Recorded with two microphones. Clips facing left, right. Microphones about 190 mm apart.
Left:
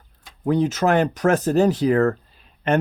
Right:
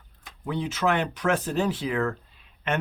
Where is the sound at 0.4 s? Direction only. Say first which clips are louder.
Left 7 dB; 45° left (ahead or behind).